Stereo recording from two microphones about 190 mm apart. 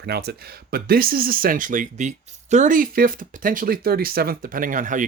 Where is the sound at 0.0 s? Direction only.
60° right (ahead or behind).